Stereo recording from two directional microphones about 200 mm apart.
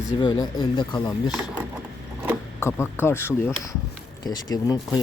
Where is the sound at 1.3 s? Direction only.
5° right (ahead or behind).